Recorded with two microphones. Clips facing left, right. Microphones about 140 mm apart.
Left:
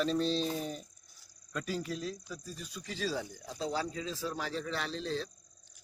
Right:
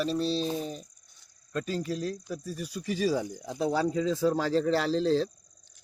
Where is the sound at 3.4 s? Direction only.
60° right (ahead or behind); by 5.2 s 90° right.